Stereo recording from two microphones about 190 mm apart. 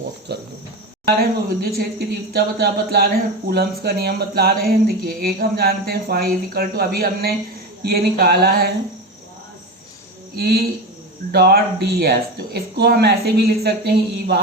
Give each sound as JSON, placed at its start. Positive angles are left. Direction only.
{"t": 0.3, "sound": "cricket", "side_deg": -60}
{"t": 1.2, "sound": "speech", "side_deg": -55}
{"t": 10.3, "sound": "speech", "side_deg": -55}